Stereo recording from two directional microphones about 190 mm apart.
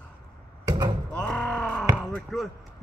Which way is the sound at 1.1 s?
5° left (ahead or behind).